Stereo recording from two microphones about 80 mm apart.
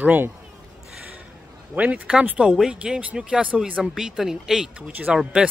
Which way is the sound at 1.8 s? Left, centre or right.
Centre.